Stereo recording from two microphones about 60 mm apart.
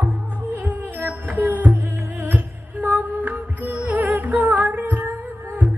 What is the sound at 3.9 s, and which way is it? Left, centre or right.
Music, right.